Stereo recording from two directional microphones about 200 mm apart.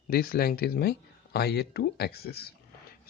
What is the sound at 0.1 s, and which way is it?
Speech, 45° left (ahead or behind).